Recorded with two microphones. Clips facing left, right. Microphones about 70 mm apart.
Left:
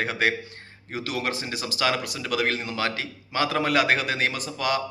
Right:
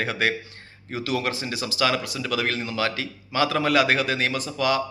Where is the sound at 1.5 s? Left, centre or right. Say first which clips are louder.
Right 2 dB; left.